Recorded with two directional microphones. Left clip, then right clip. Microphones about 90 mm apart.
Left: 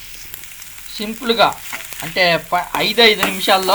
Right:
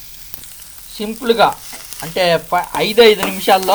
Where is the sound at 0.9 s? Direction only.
20° right (ahead or behind).